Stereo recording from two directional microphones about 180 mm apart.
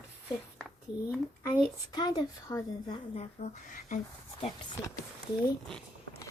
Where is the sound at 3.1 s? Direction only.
35° left (ahead or behind).